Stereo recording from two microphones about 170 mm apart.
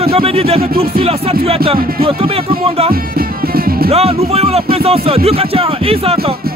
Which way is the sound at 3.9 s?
35° right (ahead or behind).